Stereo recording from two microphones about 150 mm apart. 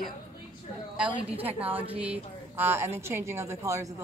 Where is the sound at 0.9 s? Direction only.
10° right (ahead or behind).